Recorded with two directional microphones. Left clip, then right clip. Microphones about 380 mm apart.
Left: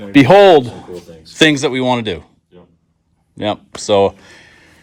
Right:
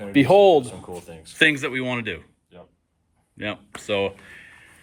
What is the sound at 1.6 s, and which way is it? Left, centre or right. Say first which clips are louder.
Speech: left 10 dB; centre.